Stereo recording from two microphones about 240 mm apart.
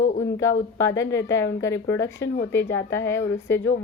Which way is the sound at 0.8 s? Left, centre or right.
Centre.